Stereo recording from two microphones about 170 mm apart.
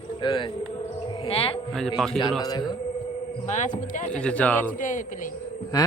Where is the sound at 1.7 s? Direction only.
Centre (ahead or behind).